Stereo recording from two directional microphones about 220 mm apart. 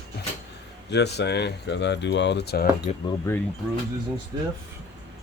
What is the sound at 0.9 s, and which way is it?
Speech, 50° left (ahead or behind).